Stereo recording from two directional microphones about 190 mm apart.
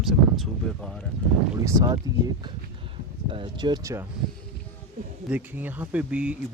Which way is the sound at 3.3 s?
25° right (ahead or behind).